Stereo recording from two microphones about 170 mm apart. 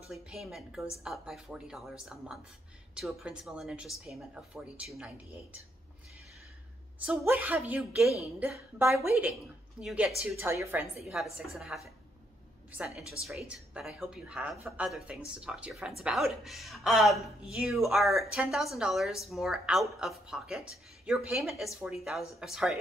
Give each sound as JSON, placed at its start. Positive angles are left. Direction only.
{"t": 0.1, "sound": "a woman's voice", "side_deg": 0}
{"t": 7.1, "sound": "a woman's voice", "side_deg": -10}
{"t": 8.7, "sound": "a woman's voice", "side_deg": -15}
{"t": 9.3, "sound": "a woman's voice", "side_deg": -5}
{"t": 11.1, "sound": "a woman's voice", "side_deg": 0}